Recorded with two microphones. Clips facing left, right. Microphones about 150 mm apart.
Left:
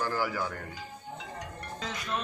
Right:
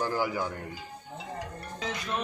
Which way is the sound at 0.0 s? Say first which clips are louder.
Right 2 dB; 15° right (ahead or behind).